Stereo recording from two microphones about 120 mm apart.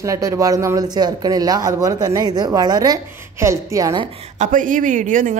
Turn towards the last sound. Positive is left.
turn(degrees=-90)